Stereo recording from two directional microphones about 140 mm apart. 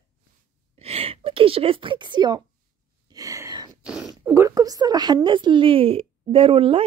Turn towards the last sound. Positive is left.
turn(degrees=-40)  # may be behind; listen again after turning